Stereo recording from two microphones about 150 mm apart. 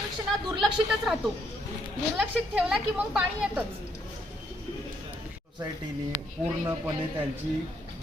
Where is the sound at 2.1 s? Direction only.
5° right (ahead or behind).